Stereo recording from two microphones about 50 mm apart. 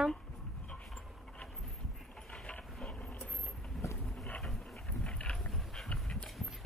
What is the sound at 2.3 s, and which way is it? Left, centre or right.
Mechanisms, left.